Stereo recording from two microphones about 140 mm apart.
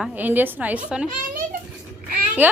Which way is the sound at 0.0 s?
10° right (ahead or behind).